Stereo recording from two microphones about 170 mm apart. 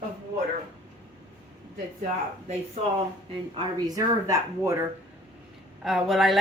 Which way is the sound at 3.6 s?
20° right (ahead or behind).